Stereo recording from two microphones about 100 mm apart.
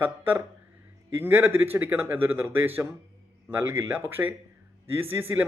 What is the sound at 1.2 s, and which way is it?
A man's voice, 20° right (ahead or behind).